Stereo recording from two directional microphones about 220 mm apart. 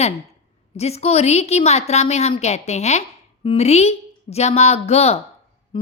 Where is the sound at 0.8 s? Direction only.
30° left (ahead or behind).